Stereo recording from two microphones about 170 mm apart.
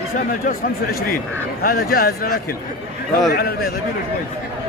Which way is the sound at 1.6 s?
60° left (ahead or behind).